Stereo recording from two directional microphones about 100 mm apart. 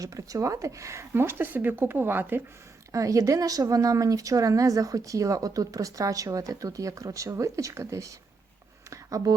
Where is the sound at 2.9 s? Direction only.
35° right (ahead or behind).